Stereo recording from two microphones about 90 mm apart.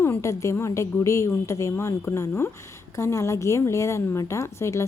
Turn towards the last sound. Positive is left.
turn(degrees=30)  # may be behind; listen again after turning